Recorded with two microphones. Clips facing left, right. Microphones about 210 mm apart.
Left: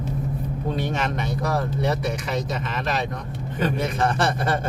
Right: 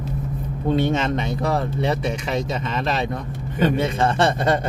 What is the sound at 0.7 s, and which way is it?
Speech, 25° right (ahead or behind).